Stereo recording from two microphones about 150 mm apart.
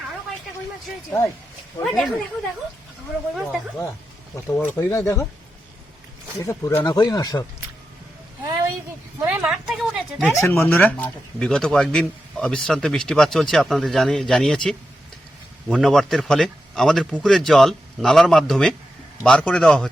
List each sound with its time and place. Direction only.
1.8 s a man's voice: centre (ahead or behind)
3.3 s a man's voice: 5° right (ahead or behind)
4.4 s speech: 15° left (ahead or behind)
6.4 s speech: 20° left (ahead or behind)
9.2 s a man's voice: 5° right (ahead or behind)
10.3 s a man's voice: 15° left (ahead or behind)